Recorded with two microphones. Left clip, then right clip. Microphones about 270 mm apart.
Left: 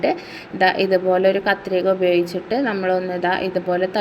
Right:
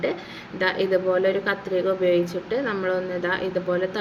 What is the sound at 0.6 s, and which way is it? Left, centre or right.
A woman's voice, left.